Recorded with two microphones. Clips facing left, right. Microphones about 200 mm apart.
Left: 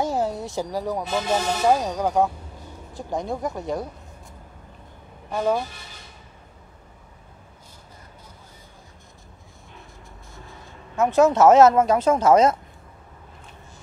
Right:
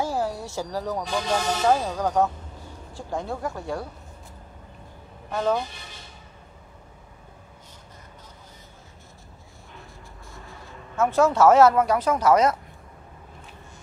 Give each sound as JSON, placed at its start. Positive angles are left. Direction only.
{"t": 0.0, "sound": "speech", "side_deg": 20}
{"t": 5.3, "sound": "speech", "side_deg": 10}
{"t": 11.0, "sound": "speech", "side_deg": 20}